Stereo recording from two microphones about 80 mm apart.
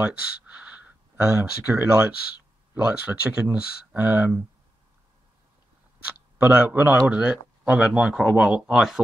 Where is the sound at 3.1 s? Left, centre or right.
Right.